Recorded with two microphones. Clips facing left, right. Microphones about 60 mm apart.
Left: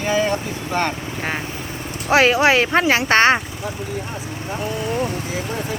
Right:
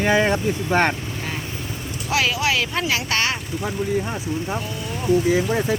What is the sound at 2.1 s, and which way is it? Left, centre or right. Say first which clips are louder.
Speech: left 7 dB; left.